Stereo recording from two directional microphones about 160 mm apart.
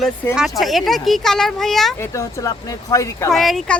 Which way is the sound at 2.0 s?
20° left (ahead or behind).